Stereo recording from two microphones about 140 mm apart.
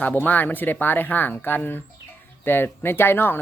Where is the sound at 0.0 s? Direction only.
10° left (ahead or behind).